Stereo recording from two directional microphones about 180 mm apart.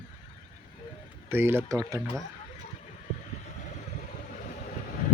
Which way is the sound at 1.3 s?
15° right (ahead or behind).